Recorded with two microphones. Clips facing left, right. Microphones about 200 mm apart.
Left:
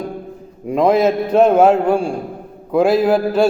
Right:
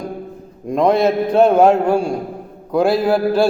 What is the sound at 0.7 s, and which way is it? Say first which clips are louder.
A man's voice: left 1 dB; 5° left (ahead or behind).